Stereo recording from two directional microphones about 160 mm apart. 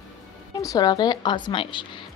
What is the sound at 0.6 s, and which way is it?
Speech, 25° left (ahead or behind).